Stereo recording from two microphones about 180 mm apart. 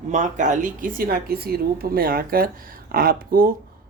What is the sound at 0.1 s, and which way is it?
A woman's voice, 40° right (ahead or behind).